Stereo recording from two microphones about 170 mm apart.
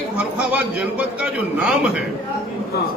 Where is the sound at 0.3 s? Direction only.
10° right (ahead or behind).